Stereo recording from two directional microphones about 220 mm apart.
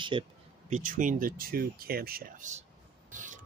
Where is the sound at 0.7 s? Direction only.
35° right (ahead or behind).